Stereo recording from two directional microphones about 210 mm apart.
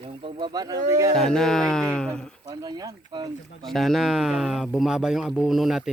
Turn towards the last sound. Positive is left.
turn(degrees=0)  # may be behind; listen again after turning